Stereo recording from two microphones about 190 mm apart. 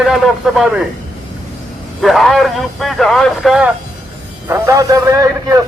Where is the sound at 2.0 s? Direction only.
Centre (ahead or behind).